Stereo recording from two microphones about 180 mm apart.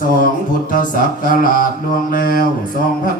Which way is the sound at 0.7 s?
50° left (ahead or behind).